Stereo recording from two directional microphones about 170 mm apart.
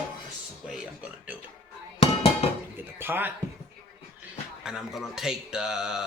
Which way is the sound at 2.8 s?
15° right (ahead or behind).